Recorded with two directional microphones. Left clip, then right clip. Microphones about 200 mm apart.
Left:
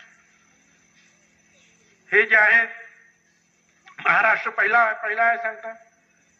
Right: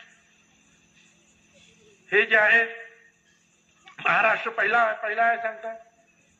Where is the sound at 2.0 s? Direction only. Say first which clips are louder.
Left 3 dB; 30° right (ahead or behind).